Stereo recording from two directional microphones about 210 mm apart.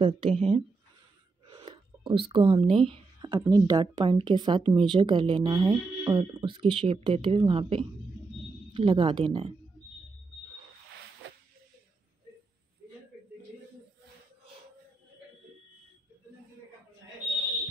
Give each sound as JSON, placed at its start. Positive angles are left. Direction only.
{"t": 0.0, "sound": "speech", "side_deg": -25}